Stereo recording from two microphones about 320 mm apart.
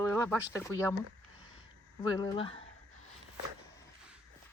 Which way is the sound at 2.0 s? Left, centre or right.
Centre.